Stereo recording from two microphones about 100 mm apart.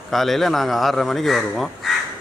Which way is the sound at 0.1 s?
Centre (ahead or behind).